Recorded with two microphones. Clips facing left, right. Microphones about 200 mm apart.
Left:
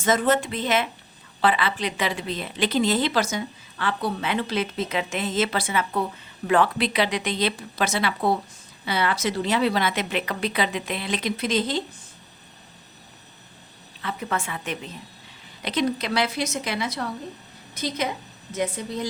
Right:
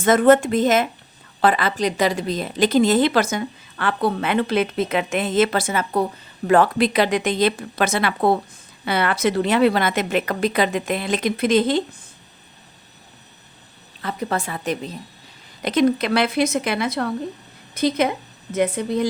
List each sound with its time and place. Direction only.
0.0 s a woman's voice: 55° right (ahead or behind)
14.0 s a woman's voice: 40° right (ahead or behind)
15.6 s speech: 50° right (ahead or behind)